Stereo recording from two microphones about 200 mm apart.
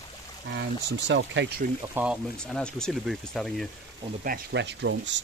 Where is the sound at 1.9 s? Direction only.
5° right (ahead or behind).